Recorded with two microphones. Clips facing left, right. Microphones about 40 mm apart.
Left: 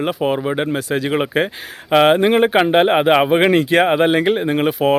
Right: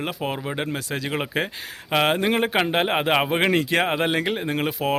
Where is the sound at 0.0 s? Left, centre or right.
Centre.